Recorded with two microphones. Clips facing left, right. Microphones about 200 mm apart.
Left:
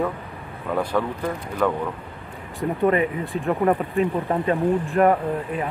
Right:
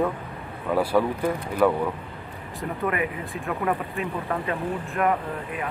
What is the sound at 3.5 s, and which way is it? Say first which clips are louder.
Speech: left 6 dB; 30° left (ahead or behind).